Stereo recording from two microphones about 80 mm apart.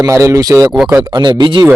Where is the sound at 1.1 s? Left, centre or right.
Right.